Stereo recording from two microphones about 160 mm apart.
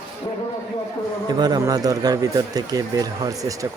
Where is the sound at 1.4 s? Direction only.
25° right (ahead or behind).